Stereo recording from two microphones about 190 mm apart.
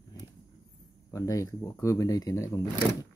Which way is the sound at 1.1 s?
15° left (ahead or behind).